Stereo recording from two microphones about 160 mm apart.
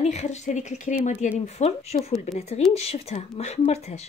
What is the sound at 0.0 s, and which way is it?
A woman's voice, 45° left (ahead or behind).